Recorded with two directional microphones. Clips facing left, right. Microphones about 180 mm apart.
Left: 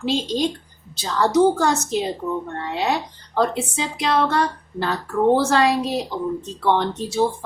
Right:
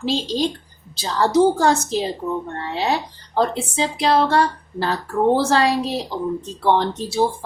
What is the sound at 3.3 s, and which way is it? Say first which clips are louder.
Speech: right 1 dB; 30° right (ahead or behind).